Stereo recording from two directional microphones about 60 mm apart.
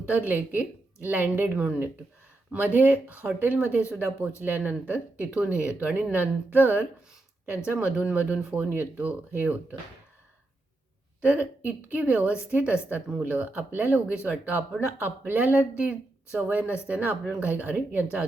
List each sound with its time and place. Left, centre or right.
0.1 s speech: right
11.2 s speech: right